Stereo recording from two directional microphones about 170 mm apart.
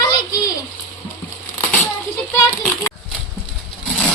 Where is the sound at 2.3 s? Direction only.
20° left (ahead or behind).